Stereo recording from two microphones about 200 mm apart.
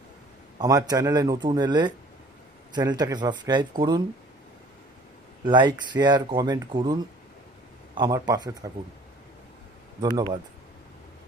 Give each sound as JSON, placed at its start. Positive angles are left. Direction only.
{"t": 0.6, "sound": "speech", "side_deg": -20}
{"t": 5.5, "sound": "speech", "side_deg": -20}
{"t": 10.0, "sound": "speech", "side_deg": -20}